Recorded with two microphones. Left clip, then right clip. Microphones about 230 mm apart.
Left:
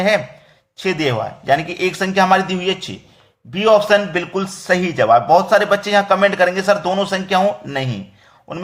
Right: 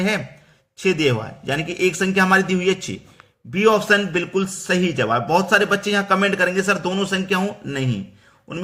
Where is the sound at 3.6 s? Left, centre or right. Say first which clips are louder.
Left 4 dB; right.